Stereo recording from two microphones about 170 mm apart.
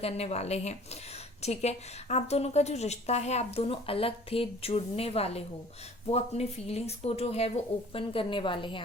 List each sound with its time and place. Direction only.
0.0 s a woman's voice: 40° left (ahead or behind)